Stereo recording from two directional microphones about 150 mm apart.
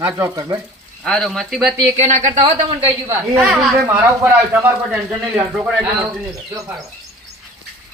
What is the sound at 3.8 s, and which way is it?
Speech, 15° right (ahead or behind).